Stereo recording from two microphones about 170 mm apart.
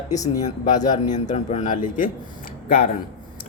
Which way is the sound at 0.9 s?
45° left (ahead or behind).